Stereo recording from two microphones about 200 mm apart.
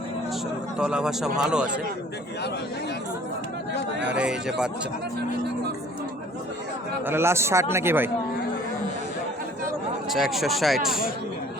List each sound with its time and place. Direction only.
0.8 s speech: 5° right (ahead or behind)
4.0 s speech: 5° right (ahead or behind)
7.0 s a man's voice: 10° right (ahead or behind)
10.1 s speech: centre (ahead or behind)